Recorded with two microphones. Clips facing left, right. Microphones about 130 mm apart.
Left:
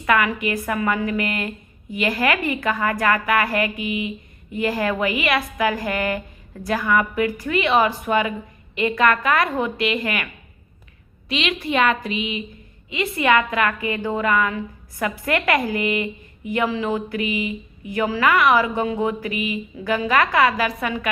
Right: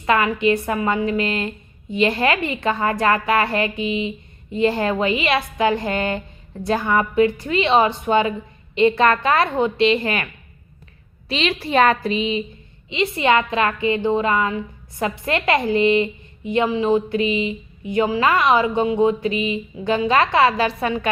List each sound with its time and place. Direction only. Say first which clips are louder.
0.0 s a woman's voice: right 2 dB; 25° right (ahead or behind)
11.3 s a woman's voice: right 1 dB; 35° right (ahead or behind)